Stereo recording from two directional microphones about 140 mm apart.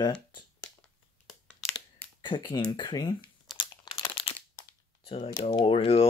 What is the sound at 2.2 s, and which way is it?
Speech, 35° left (ahead or behind).